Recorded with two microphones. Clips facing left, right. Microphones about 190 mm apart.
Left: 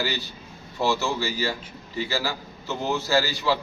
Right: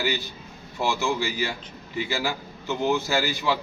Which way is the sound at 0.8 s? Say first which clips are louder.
Left 1 dB; 15° right (ahead or behind).